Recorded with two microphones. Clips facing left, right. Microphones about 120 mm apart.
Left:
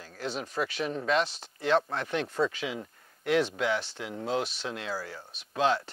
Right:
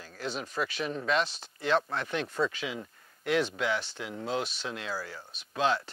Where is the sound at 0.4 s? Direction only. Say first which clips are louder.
Left 2 dB; 40° left (ahead or behind).